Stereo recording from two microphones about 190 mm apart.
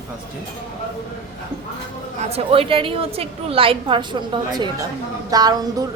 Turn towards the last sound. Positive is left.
turn(degrees=-20)  # may be behind; listen again after turning